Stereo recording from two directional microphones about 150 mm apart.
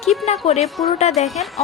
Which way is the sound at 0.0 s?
Centre (ahead or behind).